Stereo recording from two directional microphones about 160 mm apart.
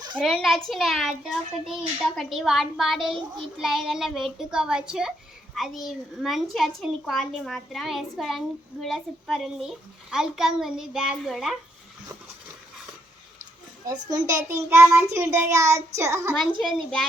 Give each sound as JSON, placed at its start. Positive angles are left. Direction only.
{"t": 0.2, "sound": "a child's voice", "side_deg": 0}
{"t": 14.3, "sound": "child singing", "side_deg": -20}
{"t": 16.6, "sound": "a child's voice", "side_deg": 5}